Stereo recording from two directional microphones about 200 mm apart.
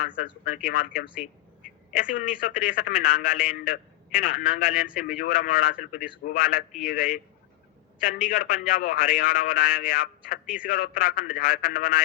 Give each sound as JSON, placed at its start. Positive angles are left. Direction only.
{"t": 0.4, "sound": "a man's voice", "side_deg": 45}